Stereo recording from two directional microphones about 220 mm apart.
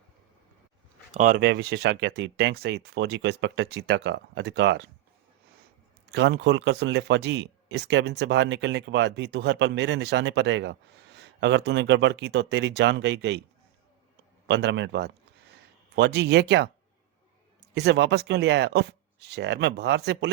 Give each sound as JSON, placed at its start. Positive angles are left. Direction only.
{"t": 1.1, "sound": "speech", "side_deg": -35}
{"t": 6.1, "sound": "speech", "side_deg": -50}
{"t": 14.4, "sound": "speech", "side_deg": -50}
{"t": 17.7, "sound": "speech", "side_deg": -50}